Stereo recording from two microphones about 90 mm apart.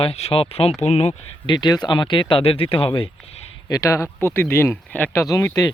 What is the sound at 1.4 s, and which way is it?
Speech, 60° left (ahead or behind).